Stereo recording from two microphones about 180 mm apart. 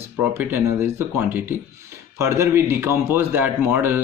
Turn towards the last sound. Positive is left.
turn(degrees=-10)  # may be behind; listen again after turning